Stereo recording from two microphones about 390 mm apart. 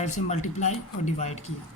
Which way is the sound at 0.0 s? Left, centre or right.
Centre.